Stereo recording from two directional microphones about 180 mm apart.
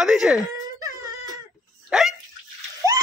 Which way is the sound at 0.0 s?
5° right (ahead or behind).